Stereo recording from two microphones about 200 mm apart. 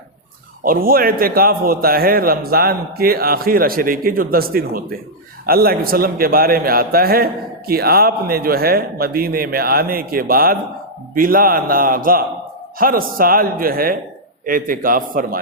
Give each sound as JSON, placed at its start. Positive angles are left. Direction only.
{"t": 0.6, "sound": "a man's voice", "side_deg": -45}